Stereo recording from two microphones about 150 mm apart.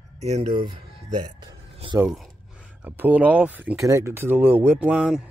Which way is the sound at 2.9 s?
10° right (ahead or behind).